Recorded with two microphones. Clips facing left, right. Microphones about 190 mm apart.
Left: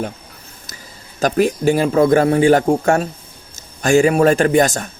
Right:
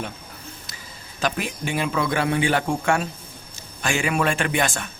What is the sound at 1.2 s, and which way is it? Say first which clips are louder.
A man's voice: left 11 dB; 40° left (ahead or behind).